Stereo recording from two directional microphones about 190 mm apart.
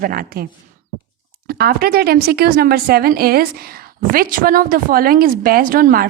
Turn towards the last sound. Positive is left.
turn(degrees=-50)  # may be behind; listen again after turning